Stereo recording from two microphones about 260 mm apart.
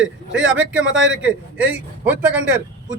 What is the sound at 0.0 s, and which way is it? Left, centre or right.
Speech, centre.